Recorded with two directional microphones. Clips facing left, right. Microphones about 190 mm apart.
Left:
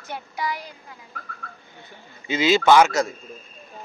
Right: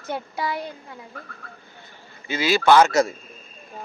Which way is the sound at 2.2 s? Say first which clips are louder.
Left 1 dB; 20° left (ahead or behind).